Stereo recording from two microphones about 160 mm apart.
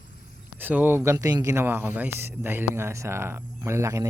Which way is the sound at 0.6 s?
10° right (ahead or behind).